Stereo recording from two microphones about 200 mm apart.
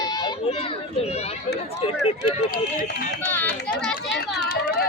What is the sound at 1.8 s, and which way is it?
Speech, 30° left (ahead or behind).